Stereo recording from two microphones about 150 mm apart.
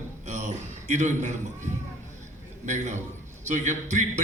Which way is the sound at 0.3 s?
50° right (ahead or behind).